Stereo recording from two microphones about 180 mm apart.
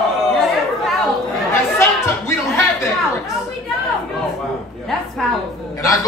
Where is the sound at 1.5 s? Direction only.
15° left (ahead or behind).